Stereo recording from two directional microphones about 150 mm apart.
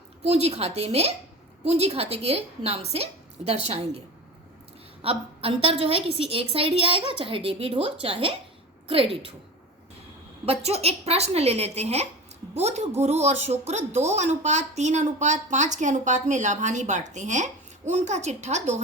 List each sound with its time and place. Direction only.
0.3 s speech: 45° right (ahead or behind)
5.0 s a woman's voice: 40° right (ahead or behind)
10.4 s speech: 40° right (ahead or behind)